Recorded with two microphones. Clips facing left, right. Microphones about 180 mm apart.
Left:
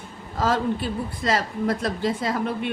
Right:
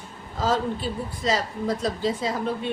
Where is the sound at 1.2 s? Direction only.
60° left (ahead or behind).